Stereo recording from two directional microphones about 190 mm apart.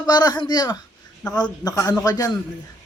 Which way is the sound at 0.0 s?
20° left (ahead or behind).